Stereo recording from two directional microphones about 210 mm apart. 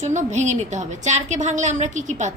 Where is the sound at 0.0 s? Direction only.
35° right (ahead or behind).